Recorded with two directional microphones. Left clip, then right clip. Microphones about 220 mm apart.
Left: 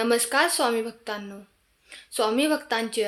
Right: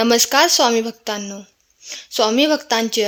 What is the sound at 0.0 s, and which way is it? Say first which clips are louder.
Speech: right 8 dB; 40° right (ahead or behind).